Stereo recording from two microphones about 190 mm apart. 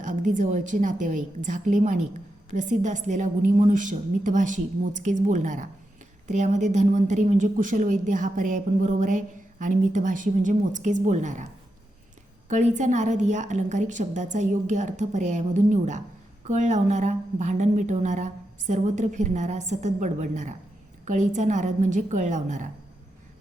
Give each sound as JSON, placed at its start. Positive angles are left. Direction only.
{"t": 0.0, "sound": "speech", "side_deg": -40}
{"t": 12.5, "sound": "speech", "side_deg": -40}